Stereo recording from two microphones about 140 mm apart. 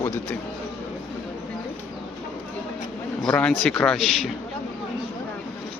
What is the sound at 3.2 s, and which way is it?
Speech, 5° left (ahead or behind).